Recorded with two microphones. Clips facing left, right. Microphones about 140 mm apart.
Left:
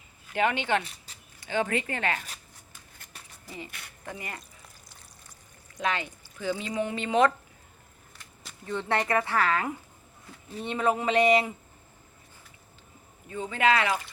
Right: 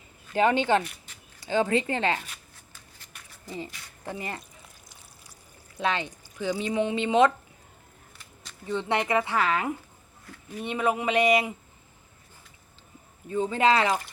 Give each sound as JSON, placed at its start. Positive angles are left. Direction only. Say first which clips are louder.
{"t": 0.3, "sound": "speech", "louder": "right 4 dB", "side_deg": -35}
{"t": 0.9, "sound": "a sound", "louder": "right 3 dB", "side_deg": 35}
{"t": 1.5, "sound": "speech", "louder": "right 4 dB", "side_deg": -30}
{"t": 3.7, "sound": "speech", "louder": "left 1 dB", "side_deg": 60}
{"t": 4.0, "sound": "speech", "louder": "right 5 dB", "side_deg": -25}
{"t": 5.9, "sound": "speech", "louder": "right 2 dB", "side_deg": -20}
{"t": 8.6, "sound": "speech", "louder": "right 1 dB", "side_deg": -20}
{"t": 13.2, "sound": "speech", "louder": "right 3 dB", "side_deg": -30}